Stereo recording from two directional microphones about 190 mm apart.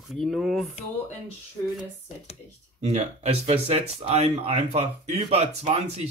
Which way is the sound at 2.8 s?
35° right (ahead or behind).